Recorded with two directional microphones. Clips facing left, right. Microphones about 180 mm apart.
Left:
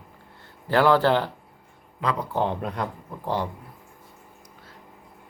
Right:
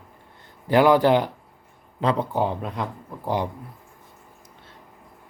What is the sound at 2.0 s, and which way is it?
Speech, 30° right (ahead or behind).